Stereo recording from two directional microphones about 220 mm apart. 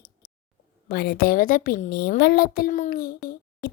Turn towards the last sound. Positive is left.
turn(degrees=40)  # may be behind; listen again after turning